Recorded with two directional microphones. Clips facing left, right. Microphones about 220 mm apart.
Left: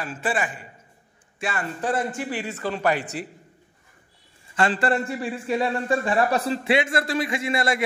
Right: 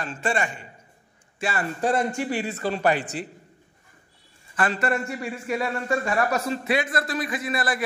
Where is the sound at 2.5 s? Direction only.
35° right (ahead or behind).